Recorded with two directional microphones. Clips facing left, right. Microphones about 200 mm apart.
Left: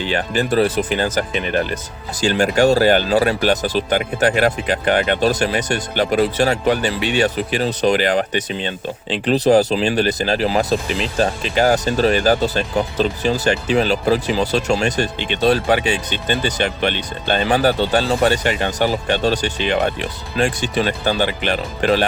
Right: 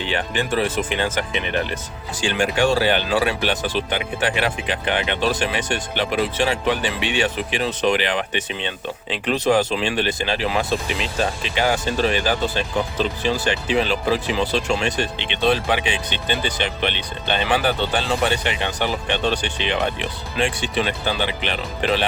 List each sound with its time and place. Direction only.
0.1 s speech: 40° left (ahead or behind)